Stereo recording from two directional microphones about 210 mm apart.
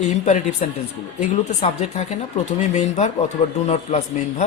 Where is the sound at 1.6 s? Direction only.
35° left (ahead or behind).